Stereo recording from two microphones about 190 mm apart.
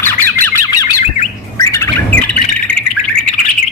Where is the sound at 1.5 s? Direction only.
15° left (ahead or behind).